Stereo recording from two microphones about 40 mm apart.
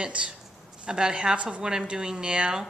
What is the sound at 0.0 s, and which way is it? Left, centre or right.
A woman's voice, right.